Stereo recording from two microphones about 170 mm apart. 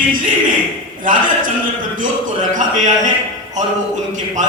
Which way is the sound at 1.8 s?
50° right (ahead or behind).